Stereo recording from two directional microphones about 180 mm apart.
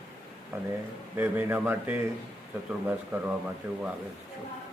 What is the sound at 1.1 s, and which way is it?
A man's voice, 10° right (ahead or behind).